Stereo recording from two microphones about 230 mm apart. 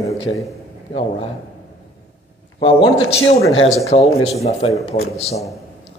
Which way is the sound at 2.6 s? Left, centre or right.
Left.